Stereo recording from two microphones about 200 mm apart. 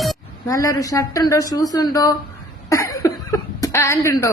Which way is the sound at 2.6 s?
15° left (ahead or behind).